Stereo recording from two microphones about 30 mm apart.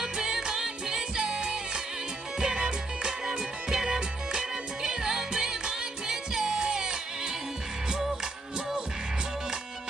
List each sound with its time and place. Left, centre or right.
0.0 s music: centre